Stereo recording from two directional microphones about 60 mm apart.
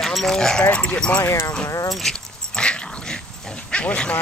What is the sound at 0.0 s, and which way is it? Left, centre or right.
Speech, centre.